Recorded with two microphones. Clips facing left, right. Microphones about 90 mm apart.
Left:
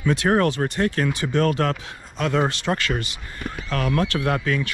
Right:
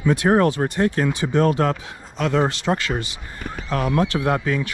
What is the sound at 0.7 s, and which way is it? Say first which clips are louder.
Speech: right 2 dB; 25° right (ahead or behind).